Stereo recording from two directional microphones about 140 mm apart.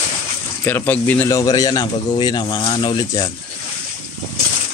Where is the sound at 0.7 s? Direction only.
15° left (ahead or behind).